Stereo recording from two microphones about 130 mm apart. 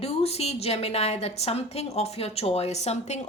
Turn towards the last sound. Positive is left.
turn(degrees=60)  # may be behind; listen again after turning